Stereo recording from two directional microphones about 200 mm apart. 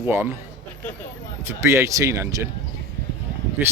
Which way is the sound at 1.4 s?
15° right (ahead or behind).